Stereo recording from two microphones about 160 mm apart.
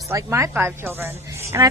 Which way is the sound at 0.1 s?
20° right (ahead or behind).